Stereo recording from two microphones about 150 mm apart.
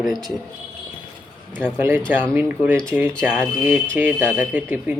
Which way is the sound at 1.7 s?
15° right (ahead or behind).